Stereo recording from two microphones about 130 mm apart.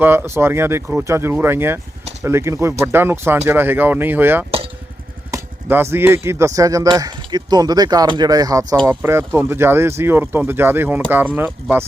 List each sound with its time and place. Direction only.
0.0 s speech: 15° right (ahead or behind)
8.9 s speech: 20° right (ahead or behind)